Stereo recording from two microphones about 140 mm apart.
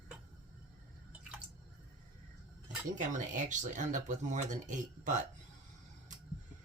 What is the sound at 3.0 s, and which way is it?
Speech, 65° right (ahead or behind).